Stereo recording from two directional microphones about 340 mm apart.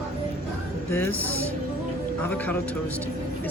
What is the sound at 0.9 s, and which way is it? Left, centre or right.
Speech, centre.